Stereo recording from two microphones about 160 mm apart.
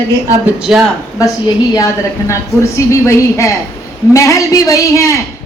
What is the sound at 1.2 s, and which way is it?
A man's voice, 20° left (ahead or behind).